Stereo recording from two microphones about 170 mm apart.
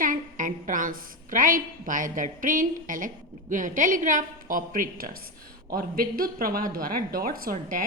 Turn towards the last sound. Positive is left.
turn(degrees=-55)  # may be behind; listen again after turning